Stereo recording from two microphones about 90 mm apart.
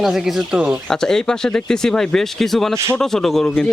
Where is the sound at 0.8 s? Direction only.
5° left (ahead or behind).